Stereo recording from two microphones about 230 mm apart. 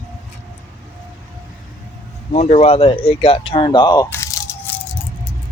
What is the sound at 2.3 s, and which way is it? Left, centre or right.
Speech, left.